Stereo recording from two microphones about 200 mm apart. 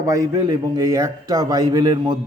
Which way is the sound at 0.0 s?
15° right (ahead or behind).